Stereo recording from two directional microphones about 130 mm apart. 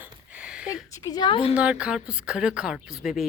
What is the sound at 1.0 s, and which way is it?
Speech, 30° left (ahead or behind).